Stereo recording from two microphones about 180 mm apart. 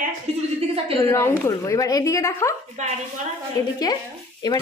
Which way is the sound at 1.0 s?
15° left (ahead or behind).